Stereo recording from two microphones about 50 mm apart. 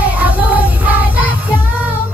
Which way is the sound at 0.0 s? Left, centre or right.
Right.